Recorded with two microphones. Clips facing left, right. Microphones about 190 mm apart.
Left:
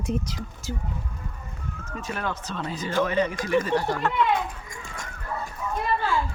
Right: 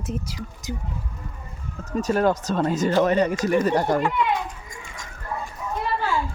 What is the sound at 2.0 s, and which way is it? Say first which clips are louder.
Speech: right 11 dB; 40° right (ahead or behind).